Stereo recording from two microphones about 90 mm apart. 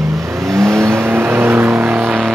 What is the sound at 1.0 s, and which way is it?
Vehicle, 25° right (ahead or behind).